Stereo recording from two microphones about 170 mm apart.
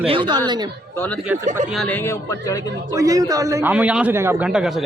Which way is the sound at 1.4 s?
50° right (ahead or behind).